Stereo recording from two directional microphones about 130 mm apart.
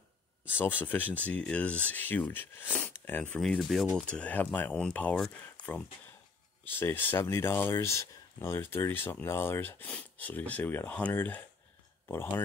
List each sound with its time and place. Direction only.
0.6 s speech: 15° left (ahead or behind)
3.3 s speech: 5° left (ahead or behind); by 12.4 s 20° left (ahead or behind)